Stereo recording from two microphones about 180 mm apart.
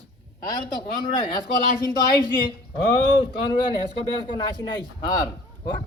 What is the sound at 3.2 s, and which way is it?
Speech, 30° left (ahead or behind).